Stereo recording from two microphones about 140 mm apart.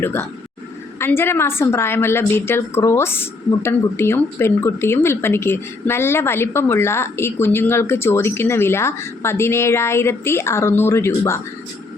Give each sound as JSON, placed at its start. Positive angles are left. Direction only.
{"t": 0.0, "sound": "a woman's voice", "side_deg": 15}